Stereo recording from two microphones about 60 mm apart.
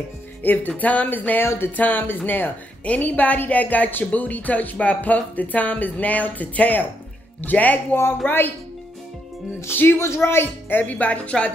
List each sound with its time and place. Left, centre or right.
0.4 s a woman's voice: left
9.7 s speech: left